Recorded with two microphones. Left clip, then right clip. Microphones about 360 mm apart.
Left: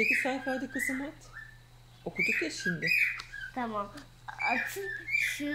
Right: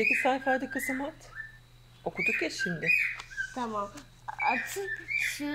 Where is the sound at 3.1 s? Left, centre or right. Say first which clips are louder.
Right 2 dB; centre.